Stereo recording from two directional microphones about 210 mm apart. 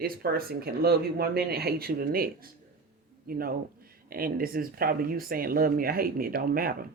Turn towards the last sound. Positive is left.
turn(degrees=-45)  # may be behind; listen again after turning